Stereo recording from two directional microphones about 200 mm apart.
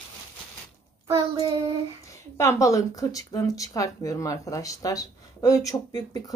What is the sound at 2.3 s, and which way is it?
Speech, 15° left (ahead or behind).